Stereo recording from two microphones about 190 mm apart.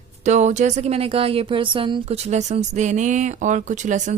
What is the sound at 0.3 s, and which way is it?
Speech, 40° right (ahead or behind).